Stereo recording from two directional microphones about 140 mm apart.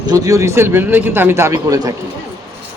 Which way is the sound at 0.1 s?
25° right (ahead or behind).